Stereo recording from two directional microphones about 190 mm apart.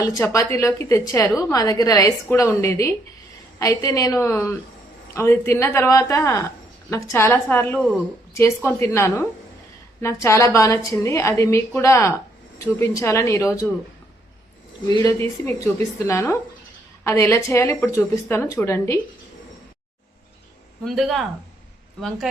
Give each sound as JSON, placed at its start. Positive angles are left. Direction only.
{"t": 0.0, "sound": "a woman's voice", "side_deg": 15}
{"t": 14.9, "sound": "a woman's voice", "side_deg": 15}
{"t": 20.8, "sound": "speech", "side_deg": 0}